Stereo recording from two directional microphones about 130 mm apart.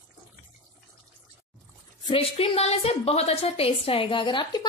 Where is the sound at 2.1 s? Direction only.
50° left (ahead or behind).